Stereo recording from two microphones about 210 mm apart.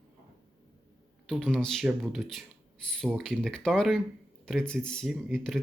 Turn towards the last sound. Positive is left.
turn(degrees=0)  # may be behind; listen again after turning